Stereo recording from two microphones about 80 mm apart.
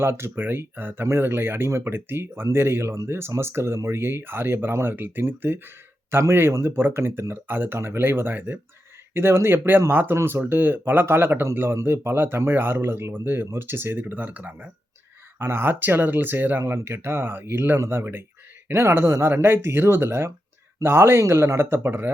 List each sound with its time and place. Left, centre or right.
0.0 s speech: right